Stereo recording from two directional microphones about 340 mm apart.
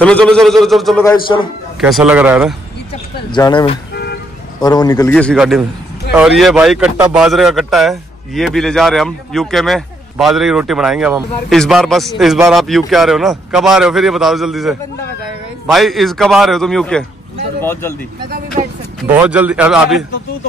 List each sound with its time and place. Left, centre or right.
0.0 s speech: centre
3.3 s speech: centre
3.9 s vehicle: left
4.6 s speech: centre
19.1 s speech: centre